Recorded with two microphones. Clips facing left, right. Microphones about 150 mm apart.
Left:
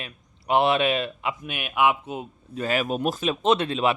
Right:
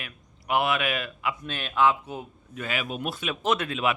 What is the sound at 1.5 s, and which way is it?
Speech, 15° left (ahead or behind).